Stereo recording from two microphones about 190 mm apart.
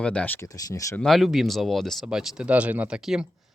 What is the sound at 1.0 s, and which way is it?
Speech, centre (ahead or behind).